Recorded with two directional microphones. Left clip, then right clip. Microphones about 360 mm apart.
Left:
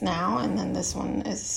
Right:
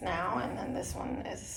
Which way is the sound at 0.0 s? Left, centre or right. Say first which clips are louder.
Left 6 dB; centre.